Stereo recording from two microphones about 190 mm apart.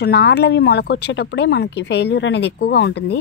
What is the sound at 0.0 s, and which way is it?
A woman's voice, 60° left (ahead or behind).